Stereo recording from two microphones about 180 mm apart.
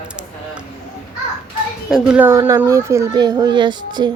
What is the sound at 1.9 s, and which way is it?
Speech, 5° right (ahead or behind).